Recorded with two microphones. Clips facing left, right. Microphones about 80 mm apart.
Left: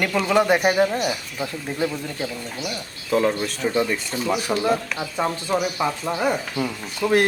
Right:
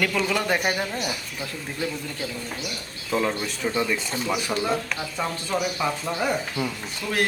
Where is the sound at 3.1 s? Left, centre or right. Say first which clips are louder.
Left 4 dB; centre.